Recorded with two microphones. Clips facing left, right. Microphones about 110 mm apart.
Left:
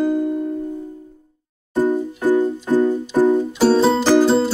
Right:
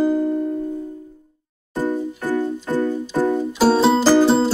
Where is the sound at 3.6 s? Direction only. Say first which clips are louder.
Right 1 dB; 5° right (ahead or behind).